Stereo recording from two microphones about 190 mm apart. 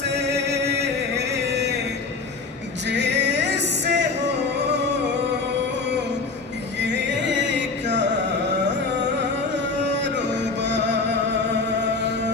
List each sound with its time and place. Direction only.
0.0 s chant: 65° right (ahead or behind)
2.9 s music: 65° right (ahead or behind)
6.8 s music: 65° right (ahead or behind)
9.8 s music: 65° right (ahead or behind)